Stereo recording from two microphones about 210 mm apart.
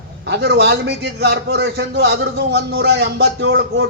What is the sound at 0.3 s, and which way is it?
A man's voice, 50° right (ahead or behind).